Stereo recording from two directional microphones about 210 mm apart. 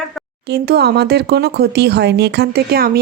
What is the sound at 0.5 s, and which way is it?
Speech, 50° right (ahead or behind).